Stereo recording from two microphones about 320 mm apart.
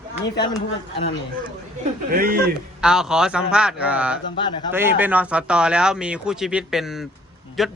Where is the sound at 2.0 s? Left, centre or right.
Right.